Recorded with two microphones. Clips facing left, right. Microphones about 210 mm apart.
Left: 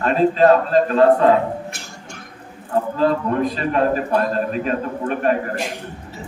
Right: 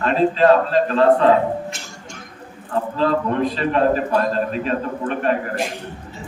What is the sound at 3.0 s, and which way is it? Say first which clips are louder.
A man's voice: even; 45° left (ahead or behind).